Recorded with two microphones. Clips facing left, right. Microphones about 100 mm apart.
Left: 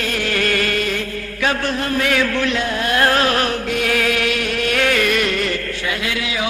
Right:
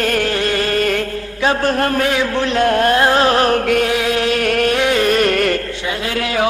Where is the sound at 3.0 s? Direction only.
25° right (ahead or behind).